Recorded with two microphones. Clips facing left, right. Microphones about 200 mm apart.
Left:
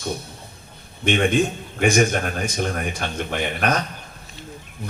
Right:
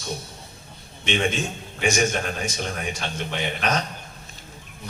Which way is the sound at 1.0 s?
55° left (ahead or behind).